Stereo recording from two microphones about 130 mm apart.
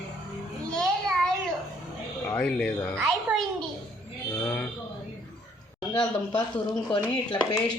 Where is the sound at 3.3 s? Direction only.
10° right (ahead or behind).